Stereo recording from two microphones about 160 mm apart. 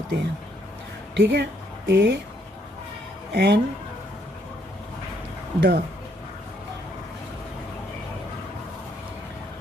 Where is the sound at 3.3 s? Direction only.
90° right.